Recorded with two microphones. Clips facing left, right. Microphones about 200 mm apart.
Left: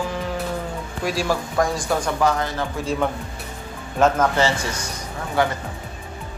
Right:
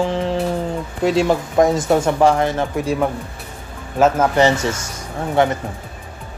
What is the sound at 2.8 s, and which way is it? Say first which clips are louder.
Speech: right 3 dB; 10° right (ahead or behind).